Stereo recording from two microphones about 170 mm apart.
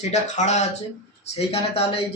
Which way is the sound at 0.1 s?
45° left (ahead or behind).